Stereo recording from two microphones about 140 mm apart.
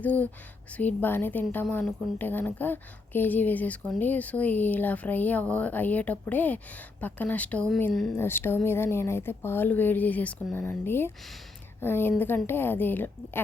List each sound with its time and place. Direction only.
0.0 s a woman's voice: 10° left (ahead or behind)